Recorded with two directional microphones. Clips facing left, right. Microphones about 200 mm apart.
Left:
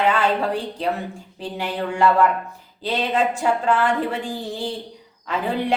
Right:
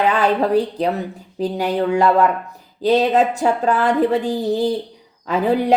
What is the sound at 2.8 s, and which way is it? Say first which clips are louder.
Speech: right 7 dB; 40° right (ahead or behind).